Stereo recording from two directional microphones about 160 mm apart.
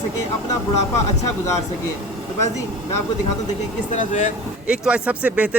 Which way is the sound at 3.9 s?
50° left (ahead or behind).